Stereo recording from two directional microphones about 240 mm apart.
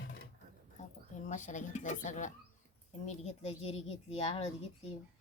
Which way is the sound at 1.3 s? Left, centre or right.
Left.